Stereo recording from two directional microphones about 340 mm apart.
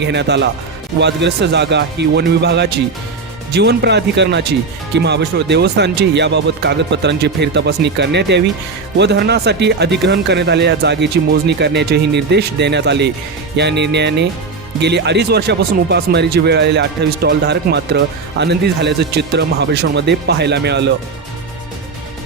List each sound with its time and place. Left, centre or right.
0.0 s speech: right